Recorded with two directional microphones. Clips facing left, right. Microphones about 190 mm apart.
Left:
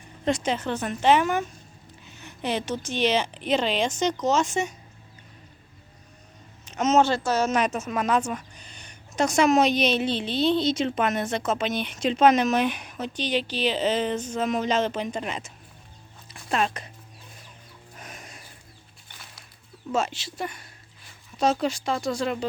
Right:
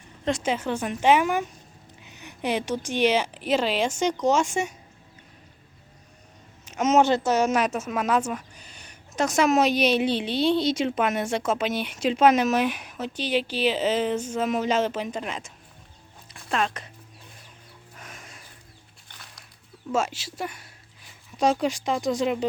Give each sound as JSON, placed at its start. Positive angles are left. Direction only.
{"t": 0.3, "sound": "a woman's voice", "side_deg": -5}
{"t": 6.7, "sound": "a woman's voice", "side_deg": -10}
{"t": 17.9, "sound": "a sound", "side_deg": 20}
{"t": 19.9, "sound": "a woman's voice", "side_deg": -10}